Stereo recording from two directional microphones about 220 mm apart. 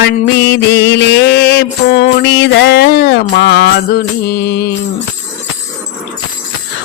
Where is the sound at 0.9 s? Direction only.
50° left (ahead or behind).